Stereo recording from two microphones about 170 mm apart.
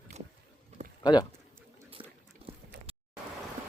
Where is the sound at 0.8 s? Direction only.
40° right (ahead or behind).